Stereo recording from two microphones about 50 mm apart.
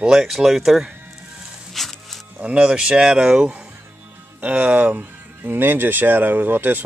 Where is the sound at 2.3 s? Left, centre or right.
Right.